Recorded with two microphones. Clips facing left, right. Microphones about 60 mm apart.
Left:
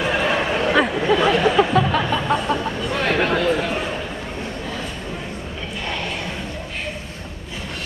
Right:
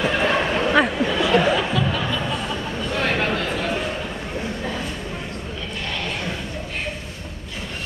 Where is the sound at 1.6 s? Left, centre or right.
Left.